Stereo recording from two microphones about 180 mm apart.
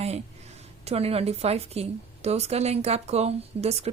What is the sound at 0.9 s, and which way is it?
A woman's voice, 35° right (ahead or behind).